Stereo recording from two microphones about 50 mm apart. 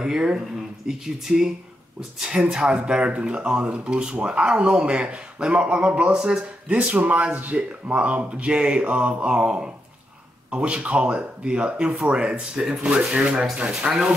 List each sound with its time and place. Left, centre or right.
0.0 s speech: centre
6.9 s speech: right
12.5 s speech: centre